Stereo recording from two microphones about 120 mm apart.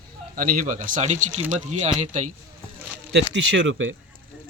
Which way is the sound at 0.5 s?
90° right.